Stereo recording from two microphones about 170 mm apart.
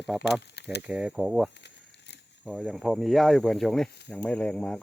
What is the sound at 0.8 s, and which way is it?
Speech, 5° right (ahead or behind).